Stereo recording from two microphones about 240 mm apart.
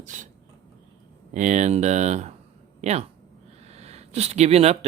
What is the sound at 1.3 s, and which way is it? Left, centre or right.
Speech, right.